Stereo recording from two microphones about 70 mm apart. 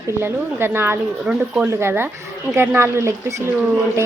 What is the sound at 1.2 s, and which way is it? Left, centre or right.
Speech, centre.